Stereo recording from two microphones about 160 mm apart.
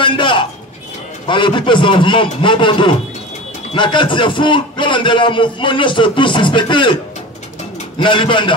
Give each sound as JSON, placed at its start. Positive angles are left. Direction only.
{"t": 0.0, "sound": "a man's voice", "side_deg": 30}
{"t": 8.0, "sound": "a man's voice", "side_deg": 30}